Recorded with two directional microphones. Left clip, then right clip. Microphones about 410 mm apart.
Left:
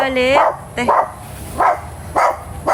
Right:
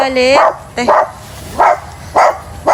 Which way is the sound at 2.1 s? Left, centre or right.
Centre.